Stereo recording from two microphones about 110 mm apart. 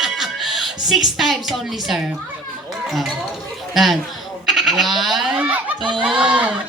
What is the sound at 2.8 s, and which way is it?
A man's voice, centre (ahead or behind).